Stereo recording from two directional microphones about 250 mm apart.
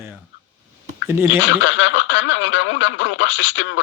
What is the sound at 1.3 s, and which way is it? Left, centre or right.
Speech, left.